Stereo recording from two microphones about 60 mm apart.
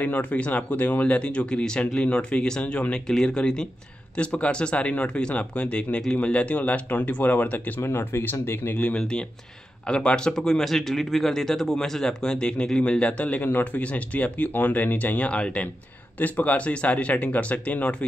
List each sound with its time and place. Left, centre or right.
0.0 s speech: left
7.8 s speech: left
8.7 s speech: centre